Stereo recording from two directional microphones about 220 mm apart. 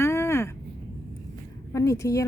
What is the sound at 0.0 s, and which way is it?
Vehicle, 10° left (ahead or behind).